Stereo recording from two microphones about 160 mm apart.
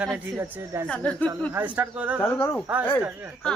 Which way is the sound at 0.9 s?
10° left (ahead or behind).